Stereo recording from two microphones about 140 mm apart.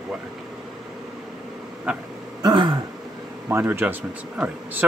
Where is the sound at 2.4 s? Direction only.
35° right (ahead or behind).